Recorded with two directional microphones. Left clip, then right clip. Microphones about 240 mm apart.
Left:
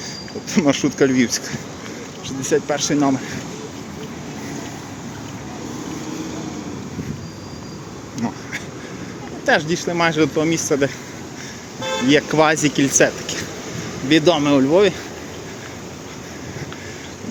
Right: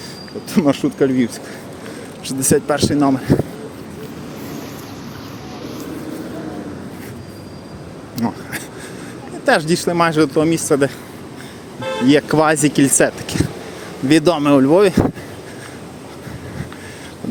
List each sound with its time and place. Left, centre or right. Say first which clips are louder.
0.5 s speech: right 1 dB; centre
2.2 s speech: right 3 dB; right
8.1 s a sound: right 3 dB; right
9.5 s speech: right 3 dB; right
12.0 s speech: right 2 dB; centre